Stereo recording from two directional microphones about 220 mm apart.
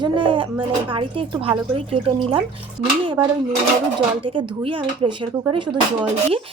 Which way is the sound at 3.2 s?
10° right (ahead or behind).